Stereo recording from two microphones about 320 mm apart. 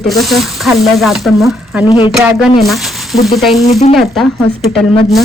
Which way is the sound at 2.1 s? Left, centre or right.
Centre.